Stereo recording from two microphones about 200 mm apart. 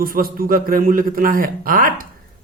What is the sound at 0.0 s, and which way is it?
A man's voice, 45° right (ahead or behind).